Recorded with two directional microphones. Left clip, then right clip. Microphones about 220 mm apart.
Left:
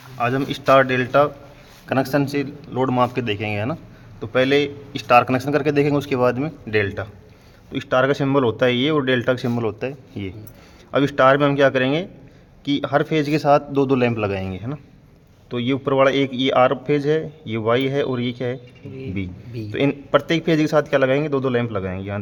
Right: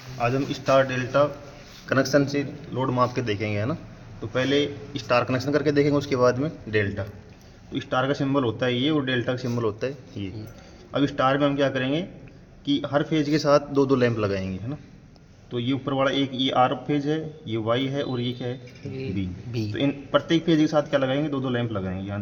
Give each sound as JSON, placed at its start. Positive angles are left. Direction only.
{"t": 0.2, "sound": "a man's voice", "side_deg": 45}
{"t": 15.4, "sound": "a man's voice", "side_deg": 50}
{"t": 19.7, "sound": "a man's voice", "side_deg": 50}